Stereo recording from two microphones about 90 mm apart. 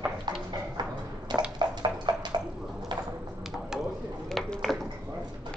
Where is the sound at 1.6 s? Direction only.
55° right (ahead or behind).